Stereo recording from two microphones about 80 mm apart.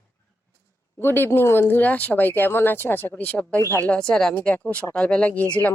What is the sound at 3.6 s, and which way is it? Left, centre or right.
Speech, left.